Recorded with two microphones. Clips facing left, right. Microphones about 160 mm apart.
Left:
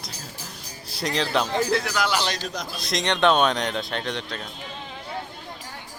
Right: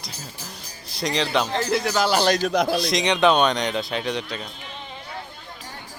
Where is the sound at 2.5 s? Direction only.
65° right (ahead or behind).